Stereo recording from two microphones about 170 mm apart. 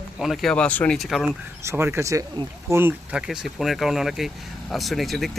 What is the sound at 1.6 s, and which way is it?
Speech, 15° right (ahead or behind).